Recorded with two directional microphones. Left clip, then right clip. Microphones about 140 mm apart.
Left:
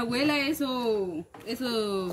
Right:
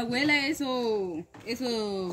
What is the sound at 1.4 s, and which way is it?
Speech, 30° right (ahead or behind).